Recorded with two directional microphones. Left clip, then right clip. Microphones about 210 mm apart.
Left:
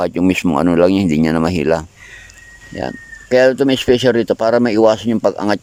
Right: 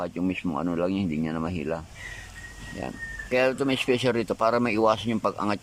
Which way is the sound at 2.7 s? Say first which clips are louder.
Left 10 dB; 30° left (ahead or behind).